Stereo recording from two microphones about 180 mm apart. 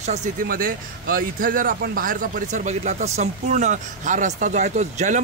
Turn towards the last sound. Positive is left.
turn(degrees=-40)  # may be behind; listen again after turning